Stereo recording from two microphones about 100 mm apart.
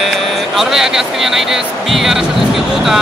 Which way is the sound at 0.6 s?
5° right (ahead or behind).